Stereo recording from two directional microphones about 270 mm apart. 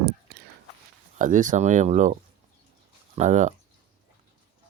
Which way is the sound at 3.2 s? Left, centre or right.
Right.